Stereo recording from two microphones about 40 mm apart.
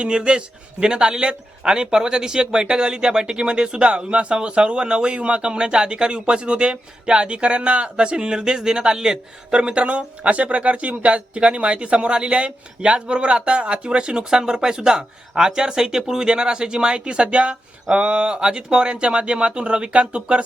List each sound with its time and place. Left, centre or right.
0.0 s a man's voice: right